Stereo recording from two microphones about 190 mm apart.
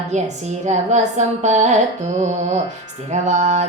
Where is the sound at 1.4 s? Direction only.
40° right (ahead or behind).